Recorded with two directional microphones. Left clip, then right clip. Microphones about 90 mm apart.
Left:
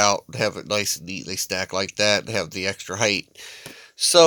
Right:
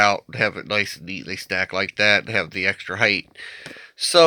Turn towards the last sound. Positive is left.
turn(degrees=30)  # may be behind; listen again after turning